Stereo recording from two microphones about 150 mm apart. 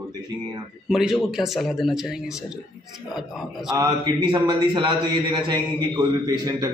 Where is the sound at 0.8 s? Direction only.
Centre (ahead or behind).